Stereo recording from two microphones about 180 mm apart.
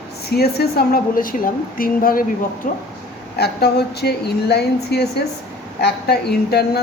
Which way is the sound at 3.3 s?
65° left (ahead or behind).